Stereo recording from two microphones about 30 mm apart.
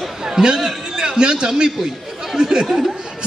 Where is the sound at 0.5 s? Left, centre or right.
Centre.